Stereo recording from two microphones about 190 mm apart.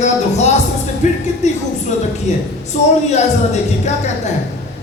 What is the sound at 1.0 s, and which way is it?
Speech, 35° left (ahead or behind).